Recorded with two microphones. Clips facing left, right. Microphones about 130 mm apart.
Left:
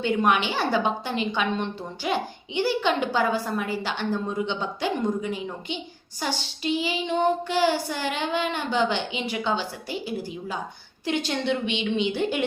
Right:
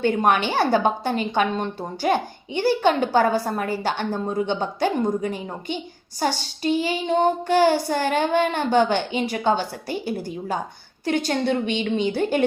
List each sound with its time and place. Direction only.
0.0 s a woman's voice: 45° right (ahead or behind)